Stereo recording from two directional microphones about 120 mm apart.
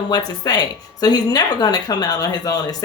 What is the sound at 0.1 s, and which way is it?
Speech, 35° left (ahead or behind).